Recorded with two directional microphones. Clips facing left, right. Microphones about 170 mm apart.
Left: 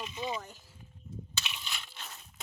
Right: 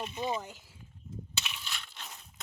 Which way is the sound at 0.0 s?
50° right (ahead or behind).